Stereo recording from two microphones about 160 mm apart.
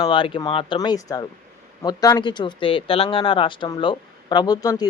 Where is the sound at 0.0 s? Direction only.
30° left (ahead or behind).